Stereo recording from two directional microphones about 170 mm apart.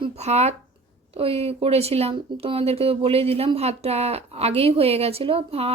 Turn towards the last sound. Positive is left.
turn(degrees=-35)  # may be behind; listen again after turning